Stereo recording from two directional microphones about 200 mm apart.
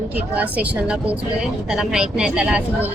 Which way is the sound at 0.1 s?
5° right (ahead or behind).